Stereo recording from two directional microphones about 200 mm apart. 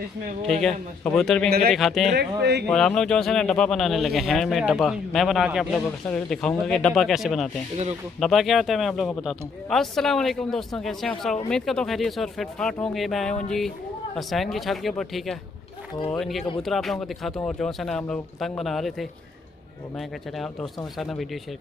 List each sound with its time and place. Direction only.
0.5 s a man's voice: centre (ahead or behind)
2.1 s speech: 55° right (ahead or behind)
2.7 s a man's voice: centre (ahead or behind)
21.0 s a man's voice: centre (ahead or behind)